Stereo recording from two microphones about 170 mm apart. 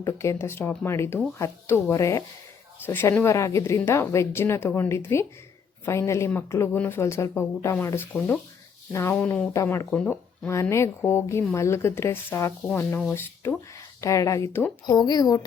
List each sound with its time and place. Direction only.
0.0 s speech: 15° left (ahead or behind)